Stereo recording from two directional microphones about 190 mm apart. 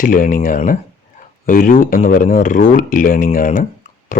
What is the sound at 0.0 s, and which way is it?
Speech, 45° left (ahead or behind).